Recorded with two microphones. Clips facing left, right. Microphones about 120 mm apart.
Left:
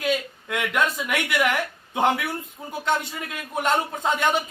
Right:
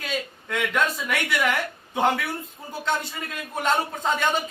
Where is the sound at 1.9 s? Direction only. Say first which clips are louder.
Left 1 dB; 15° left (ahead or behind).